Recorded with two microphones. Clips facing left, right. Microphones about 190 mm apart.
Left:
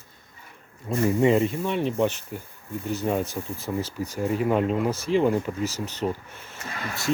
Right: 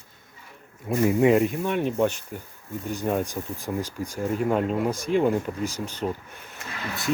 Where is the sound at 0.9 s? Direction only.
10° right (ahead or behind).